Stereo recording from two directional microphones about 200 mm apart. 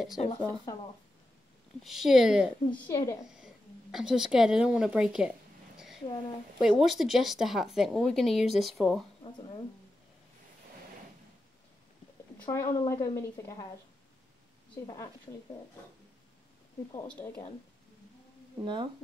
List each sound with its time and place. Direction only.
0.2 s speech: 30° left (ahead or behind)
1.8 s a woman's voice: centre (ahead or behind)
2.7 s a woman's voice: 15° left (ahead or behind)
3.3 s a woman's voice: 5° right (ahead or behind)
5.8 s a sound: centre (ahead or behind)
6.6 s a woman's voice: centre (ahead or behind)
12.4 s a woman's voice: 15° left (ahead or behind)
17.1 s a woman's voice: 10° left (ahead or behind)
18.6 s speech: 25° right (ahead or behind)